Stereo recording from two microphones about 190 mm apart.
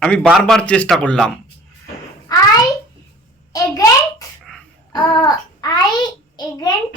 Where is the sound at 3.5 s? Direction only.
20° left (ahead or behind).